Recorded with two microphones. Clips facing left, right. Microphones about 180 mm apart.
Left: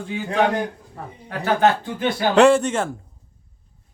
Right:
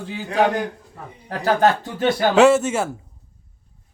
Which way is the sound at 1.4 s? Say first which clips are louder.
Right 1 dB; 40° right (ahead or behind).